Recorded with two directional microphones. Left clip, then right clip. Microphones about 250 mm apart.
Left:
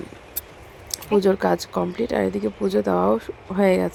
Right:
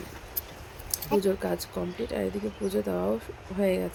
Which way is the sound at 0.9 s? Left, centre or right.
Left.